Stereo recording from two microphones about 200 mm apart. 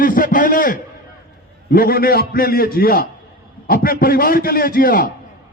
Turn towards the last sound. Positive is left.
turn(degrees=45)  # may be behind; listen again after turning